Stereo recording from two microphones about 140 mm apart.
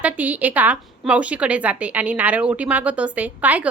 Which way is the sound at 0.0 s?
10° right (ahead or behind).